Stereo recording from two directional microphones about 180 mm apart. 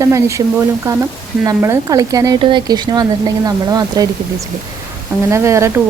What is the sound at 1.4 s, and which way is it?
Speech, 15° right (ahead or behind).